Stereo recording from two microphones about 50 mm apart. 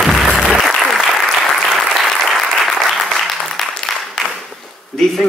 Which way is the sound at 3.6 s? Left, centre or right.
Centre.